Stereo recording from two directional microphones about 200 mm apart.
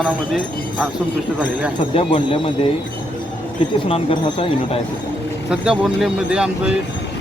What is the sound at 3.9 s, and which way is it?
Speech, 25° left (ahead or behind).